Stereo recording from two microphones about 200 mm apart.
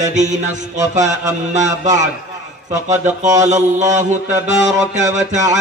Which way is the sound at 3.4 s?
35° right (ahead or behind).